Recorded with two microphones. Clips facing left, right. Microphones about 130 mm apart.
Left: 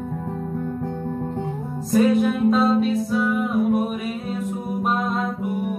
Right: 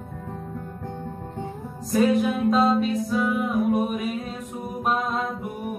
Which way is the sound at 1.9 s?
Centre (ahead or behind).